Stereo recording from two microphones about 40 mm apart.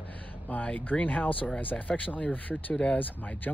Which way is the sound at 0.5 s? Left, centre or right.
Left.